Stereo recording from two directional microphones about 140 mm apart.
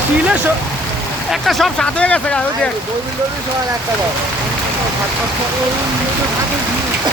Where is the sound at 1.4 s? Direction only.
Centre (ahead or behind).